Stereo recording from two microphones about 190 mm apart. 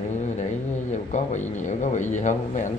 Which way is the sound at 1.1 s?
40° left (ahead or behind).